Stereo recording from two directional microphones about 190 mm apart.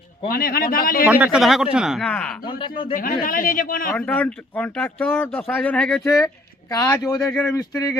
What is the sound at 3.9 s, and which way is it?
A man's voice, 10° left (ahead or behind).